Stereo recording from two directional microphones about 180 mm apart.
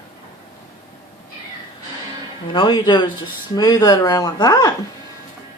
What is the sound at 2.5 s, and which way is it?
Speech, 25° left (ahead or behind).